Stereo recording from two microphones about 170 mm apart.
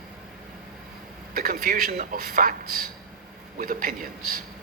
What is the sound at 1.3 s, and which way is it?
Speech, 60° right (ahead or behind).